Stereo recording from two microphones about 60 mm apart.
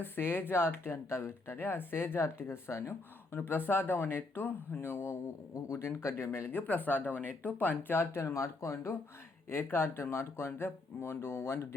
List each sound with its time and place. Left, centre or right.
0.0 s speech: left
3.3 s speech: left
6.5 s speech: left
8.2 s speech: left